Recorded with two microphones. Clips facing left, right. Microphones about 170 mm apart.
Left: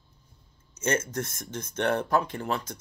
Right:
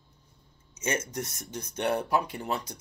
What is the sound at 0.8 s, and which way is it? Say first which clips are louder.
Speech: left 3 dB; 15° right (ahead or behind).